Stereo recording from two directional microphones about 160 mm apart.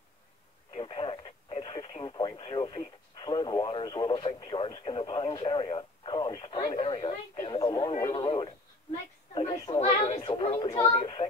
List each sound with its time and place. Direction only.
0.7 s speech: 35° left (ahead or behind)
9.8 s speech: 40° left (ahead or behind)